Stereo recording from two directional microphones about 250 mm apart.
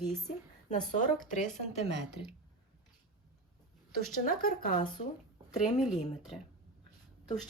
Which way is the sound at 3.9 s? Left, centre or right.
Left.